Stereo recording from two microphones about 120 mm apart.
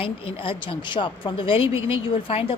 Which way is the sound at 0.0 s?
45° left (ahead or behind).